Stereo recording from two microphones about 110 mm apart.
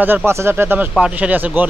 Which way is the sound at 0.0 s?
20° right (ahead or behind).